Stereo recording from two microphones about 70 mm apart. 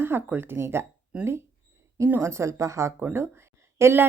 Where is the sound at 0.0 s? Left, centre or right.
Right.